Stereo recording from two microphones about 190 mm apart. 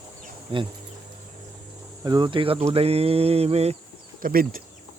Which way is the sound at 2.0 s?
20° right (ahead or behind).